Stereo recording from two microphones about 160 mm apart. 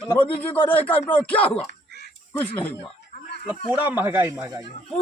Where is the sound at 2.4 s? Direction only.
10° left (ahead or behind).